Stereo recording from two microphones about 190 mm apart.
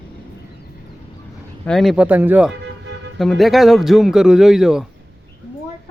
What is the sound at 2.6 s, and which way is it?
Vehicle, 70° right (ahead or behind).